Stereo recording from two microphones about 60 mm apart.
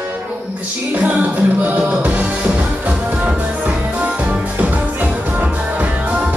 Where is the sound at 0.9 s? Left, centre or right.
Right.